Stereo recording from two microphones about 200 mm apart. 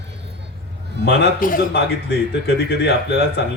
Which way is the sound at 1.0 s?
50° left (ahead or behind).